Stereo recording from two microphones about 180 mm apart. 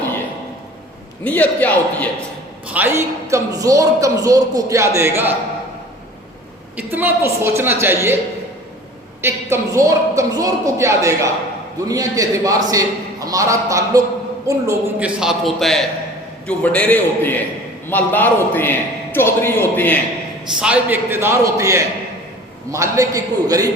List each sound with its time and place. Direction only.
1.2 s a man's voice: 10° left (ahead or behind)
2.6 s a man's voice: 10° right (ahead or behind)
6.9 s a man's voice: 10° right (ahead or behind)
9.2 s a man's voice: 15° right (ahead or behind); by 20.0 s 10° left (ahead or behind)
20.6 s a man's voice: 5° right (ahead or behind)